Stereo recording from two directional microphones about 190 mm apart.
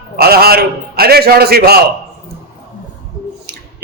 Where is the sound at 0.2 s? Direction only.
55° right (ahead or behind).